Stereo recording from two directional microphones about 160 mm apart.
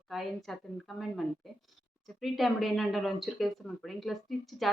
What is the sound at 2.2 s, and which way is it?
A woman's voice, centre (ahead or behind).